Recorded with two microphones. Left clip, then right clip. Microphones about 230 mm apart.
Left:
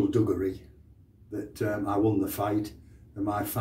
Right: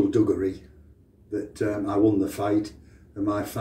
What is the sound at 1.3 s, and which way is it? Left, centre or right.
Speech, centre.